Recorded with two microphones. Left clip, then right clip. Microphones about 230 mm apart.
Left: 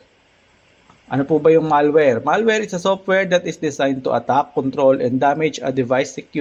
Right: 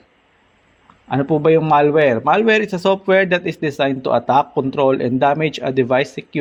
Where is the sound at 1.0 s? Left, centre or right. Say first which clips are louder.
Left 1 dB; right.